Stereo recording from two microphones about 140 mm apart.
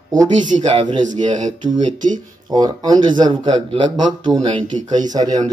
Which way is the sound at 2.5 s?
30° right (ahead or behind).